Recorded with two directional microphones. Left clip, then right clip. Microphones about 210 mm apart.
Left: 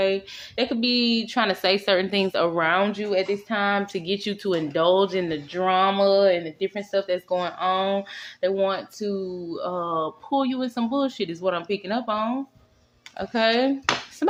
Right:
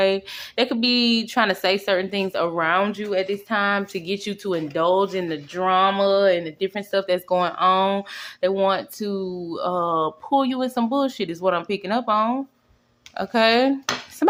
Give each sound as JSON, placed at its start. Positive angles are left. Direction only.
{"t": 0.0, "sound": "speech", "side_deg": -20}